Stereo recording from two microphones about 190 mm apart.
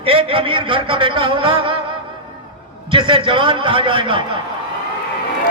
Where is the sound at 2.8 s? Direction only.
25° right (ahead or behind).